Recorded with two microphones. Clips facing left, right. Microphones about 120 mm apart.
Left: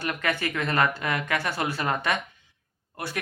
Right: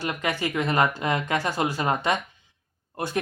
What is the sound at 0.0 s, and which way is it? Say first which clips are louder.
Speech: right 1 dB; 20° right (ahead or behind).